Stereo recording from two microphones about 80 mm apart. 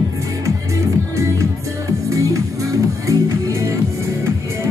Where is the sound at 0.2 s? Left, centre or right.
Right.